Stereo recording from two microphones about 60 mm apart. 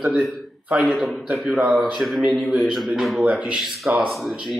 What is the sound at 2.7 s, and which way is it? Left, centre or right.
Speech, centre.